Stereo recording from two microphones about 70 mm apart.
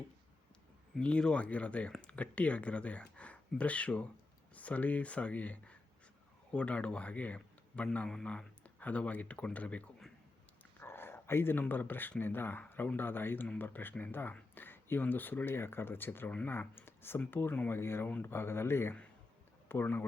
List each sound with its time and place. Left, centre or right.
0.9 s speech: centre
10.8 s a sound: left
11.7 s speech: left